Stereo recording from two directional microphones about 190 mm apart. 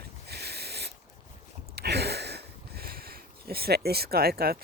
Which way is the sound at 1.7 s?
60° right (ahead or behind).